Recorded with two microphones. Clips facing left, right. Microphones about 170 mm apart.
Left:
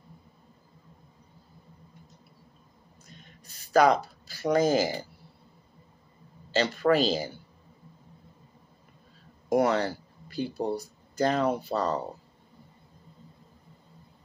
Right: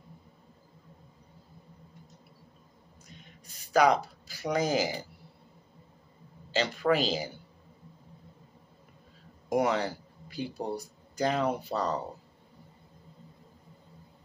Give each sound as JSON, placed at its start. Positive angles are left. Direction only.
{"t": 3.7, "sound": "speech", "side_deg": -15}
{"t": 6.6, "sound": "speech", "side_deg": 40}
{"t": 9.5, "sound": "a sound", "side_deg": -15}
{"t": 10.8, "sound": "speech", "side_deg": -10}